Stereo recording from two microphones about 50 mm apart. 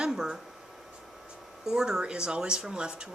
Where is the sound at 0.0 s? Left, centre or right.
Centre.